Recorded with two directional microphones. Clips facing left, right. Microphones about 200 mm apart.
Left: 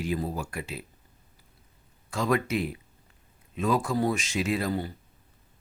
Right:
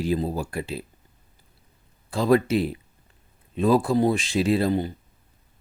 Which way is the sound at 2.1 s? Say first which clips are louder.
Right 7 dB; 35° right (ahead or behind).